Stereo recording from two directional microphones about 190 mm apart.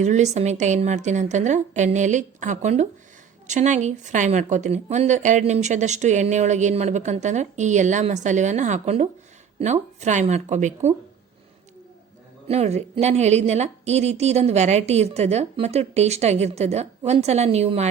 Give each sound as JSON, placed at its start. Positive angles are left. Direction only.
{"t": 0.0, "sound": "a woman's voice", "side_deg": -35}
{"t": 12.5, "sound": "a woman's voice", "side_deg": -35}